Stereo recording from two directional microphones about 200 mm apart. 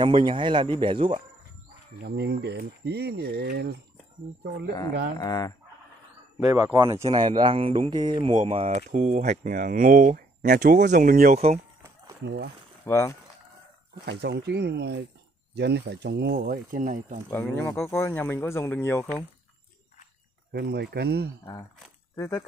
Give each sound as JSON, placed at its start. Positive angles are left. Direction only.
{"t": 0.0, "sound": "speech", "side_deg": -25}
{"t": 2.0, "sound": "speech", "side_deg": -55}
{"t": 5.1, "sound": "speech", "side_deg": 20}
{"t": 6.4, "sound": "speech", "side_deg": -20}
{"t": 11.3, "sound": "speech", "side_deg": -30}
{"t": 12.2, "sound": "speech", "side_deg": -55}
{"t": 12.8, "sound": "speech", "side_deg": 15}
{"t": 14.0, "sound": "speech", "side_deg": -60}
{"t": 17.3, "sound": "speech", "side_deg": 10}
{"t": 20.5, "sound": "speech", "side_deg": -55}
{"t": 22.1, "sound": "speech", "side_deg": 15}